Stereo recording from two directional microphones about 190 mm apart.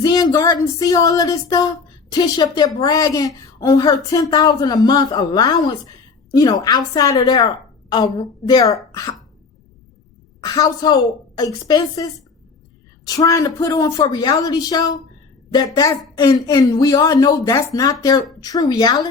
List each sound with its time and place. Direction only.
0.0 s speech: 20° left (ahead or behind)
10.4 s speech: 20° left (ahead or behind)
13.1 s speech: 20° left (ahead or behind)